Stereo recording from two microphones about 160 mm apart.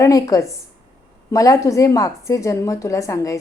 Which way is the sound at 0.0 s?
20° left (ahead or behind).